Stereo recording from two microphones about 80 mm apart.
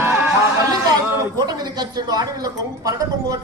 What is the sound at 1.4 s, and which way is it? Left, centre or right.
Speech, right.